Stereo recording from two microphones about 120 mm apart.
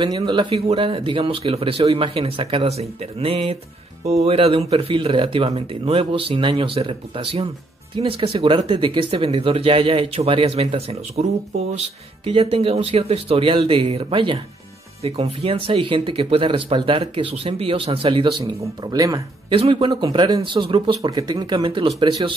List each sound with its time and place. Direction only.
0.0 s speech: 40° right (ahead or behind)
15.0 s speech: 55° right (ahead or behind)
18.4 s speech: 30° right (ahead or behind)
19.5 s speech: 45° right (ahead or behind)
20.5 s speech: 45° right (ahead or behind)